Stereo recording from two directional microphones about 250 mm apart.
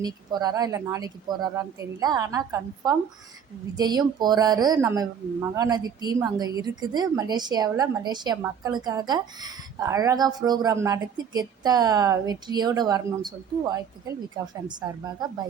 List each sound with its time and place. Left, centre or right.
0.0 s speech: centre